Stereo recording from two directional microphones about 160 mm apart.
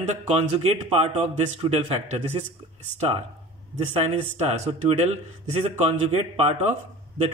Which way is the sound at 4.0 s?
40° right (ahead or behind).